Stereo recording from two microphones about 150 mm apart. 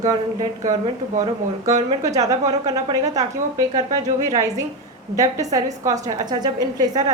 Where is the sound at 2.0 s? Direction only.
25° right (ahead or behind).